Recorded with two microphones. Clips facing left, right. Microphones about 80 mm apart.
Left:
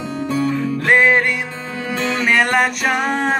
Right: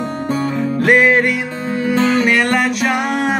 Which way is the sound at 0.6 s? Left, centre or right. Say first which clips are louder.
Right 4 dB; centre.